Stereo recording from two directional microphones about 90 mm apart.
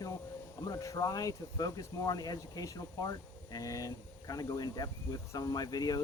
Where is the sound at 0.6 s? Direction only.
40° left (ahead or behind).